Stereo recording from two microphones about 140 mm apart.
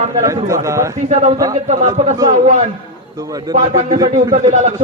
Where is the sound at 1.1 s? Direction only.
45° right (ahead or behind).